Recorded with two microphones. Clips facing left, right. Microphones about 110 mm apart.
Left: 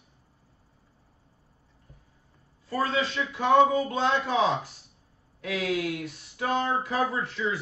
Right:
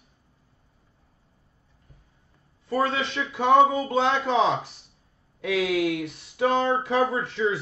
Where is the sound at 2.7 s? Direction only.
20° right (ahead or behind).